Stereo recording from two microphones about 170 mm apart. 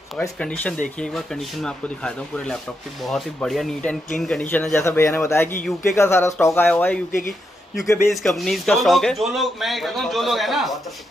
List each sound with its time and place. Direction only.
0.4 s speech: 5° left (ahead or behind)
8.1 s speech: centre (ahead or behind)